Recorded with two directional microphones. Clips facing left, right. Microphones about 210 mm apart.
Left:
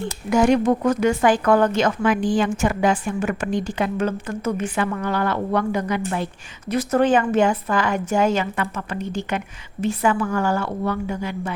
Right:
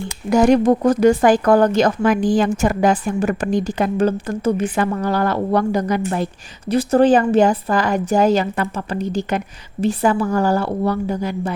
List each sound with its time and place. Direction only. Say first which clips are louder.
0.3 s speech: right 4 dB; 40° right (ahead or behind)